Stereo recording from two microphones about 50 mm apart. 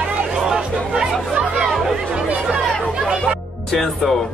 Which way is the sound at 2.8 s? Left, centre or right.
Centre.